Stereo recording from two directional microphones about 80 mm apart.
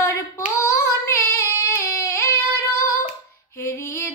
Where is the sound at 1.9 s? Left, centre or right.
Left.